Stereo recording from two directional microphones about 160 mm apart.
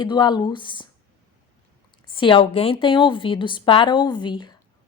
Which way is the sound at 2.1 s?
30° left (ahead or behind).